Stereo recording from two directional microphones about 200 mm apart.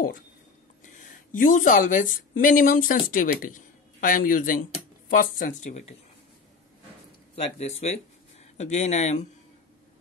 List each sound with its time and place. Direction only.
0.8 s speech: 40° left (ahead or behind)
7.5 s speech: 35° left (ahead or behind)